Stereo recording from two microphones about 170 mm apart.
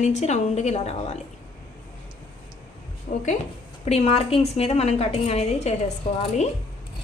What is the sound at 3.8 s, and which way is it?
A woman's voice, 40° left (ahead or behind).